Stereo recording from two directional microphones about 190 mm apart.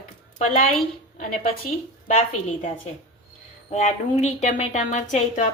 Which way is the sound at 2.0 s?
40° left (ahead or behind).